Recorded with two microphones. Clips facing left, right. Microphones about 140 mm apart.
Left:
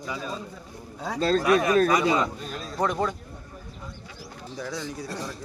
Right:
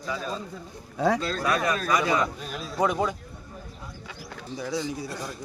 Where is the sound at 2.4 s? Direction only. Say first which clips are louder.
Right 1 dB; 5° right (ahead or behind).